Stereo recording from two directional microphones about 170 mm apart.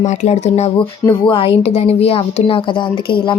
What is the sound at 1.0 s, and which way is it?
A woman's voice, 30° left (ahead or behind).